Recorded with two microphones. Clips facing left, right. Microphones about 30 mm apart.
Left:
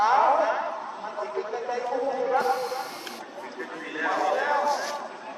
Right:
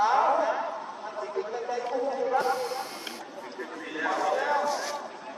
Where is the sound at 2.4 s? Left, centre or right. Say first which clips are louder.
Left 2 dB; left.